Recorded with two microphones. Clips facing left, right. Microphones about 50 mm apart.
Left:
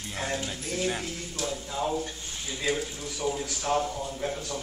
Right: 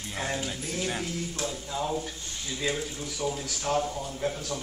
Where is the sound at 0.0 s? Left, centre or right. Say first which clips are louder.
Even; centre.